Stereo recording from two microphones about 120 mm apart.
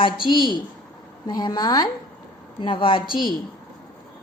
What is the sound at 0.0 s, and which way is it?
A woman's voice, 40° left (ahead or behind).